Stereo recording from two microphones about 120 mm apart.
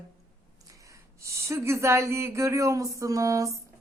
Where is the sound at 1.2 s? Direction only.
25° right (ahead or behind).